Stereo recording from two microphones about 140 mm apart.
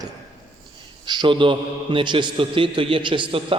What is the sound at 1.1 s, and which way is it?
A man's voice, 35° right (ahead or behind).